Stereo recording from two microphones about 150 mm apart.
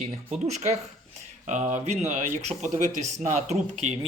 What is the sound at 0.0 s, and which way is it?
Speech, 45° right (ahead or behind).